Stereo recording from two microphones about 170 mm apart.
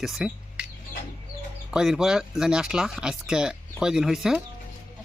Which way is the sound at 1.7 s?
5° right (ahead or behind).